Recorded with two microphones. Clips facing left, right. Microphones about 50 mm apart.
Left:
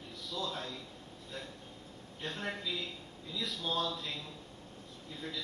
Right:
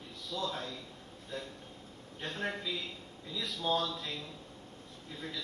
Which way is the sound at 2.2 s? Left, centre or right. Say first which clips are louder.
Right 2 dB; right.